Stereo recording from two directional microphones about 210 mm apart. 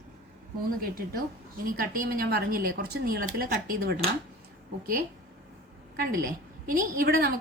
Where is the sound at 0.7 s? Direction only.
45° right (ahead or behind).